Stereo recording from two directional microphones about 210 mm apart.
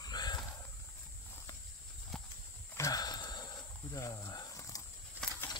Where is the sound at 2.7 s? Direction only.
15° left (ahead or behind).